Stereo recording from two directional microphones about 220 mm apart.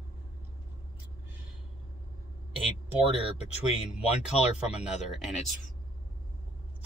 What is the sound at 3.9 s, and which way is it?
Speech, 5° right (ahead or behind).